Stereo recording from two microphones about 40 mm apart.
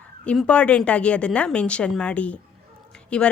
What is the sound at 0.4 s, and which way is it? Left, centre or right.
A woman's voice, left.